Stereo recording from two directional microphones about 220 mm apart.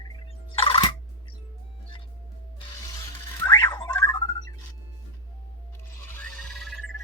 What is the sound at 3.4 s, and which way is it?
Music, 20° left (ahead or behind).